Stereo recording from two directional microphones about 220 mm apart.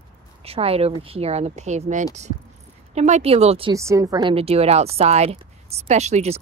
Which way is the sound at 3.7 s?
15° right (ahead or behind).